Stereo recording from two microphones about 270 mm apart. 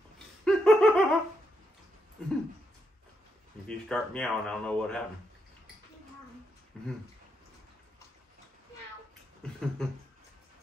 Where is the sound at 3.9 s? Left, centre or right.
Centre.